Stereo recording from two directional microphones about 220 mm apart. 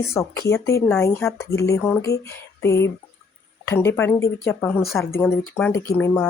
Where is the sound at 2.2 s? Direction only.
15° left (ahead or behind).